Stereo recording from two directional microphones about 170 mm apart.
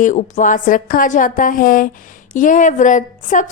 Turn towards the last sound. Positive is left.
turn(degrees=50)  # may be behind; listen again after turning